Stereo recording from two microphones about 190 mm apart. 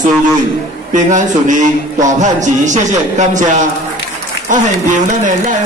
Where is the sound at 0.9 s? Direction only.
40° right (ahead or behind).